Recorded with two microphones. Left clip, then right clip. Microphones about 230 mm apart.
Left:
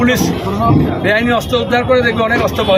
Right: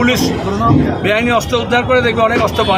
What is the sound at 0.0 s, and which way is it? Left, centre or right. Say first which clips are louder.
Speech: even; centre.